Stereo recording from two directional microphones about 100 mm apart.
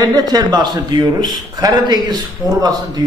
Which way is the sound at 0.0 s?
45° right (ahead or behind).